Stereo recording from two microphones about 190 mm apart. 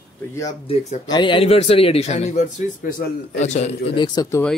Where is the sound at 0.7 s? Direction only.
35° left (ahead or behind).